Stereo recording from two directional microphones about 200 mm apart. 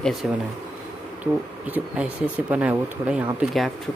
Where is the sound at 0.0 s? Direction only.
Centre (ahead or behind).